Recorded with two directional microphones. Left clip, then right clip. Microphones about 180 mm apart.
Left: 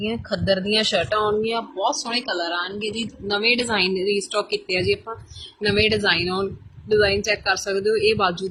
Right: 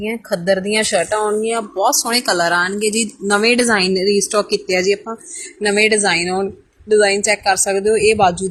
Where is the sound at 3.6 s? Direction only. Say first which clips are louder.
Right 7 dB; 50° right (ahead or behind).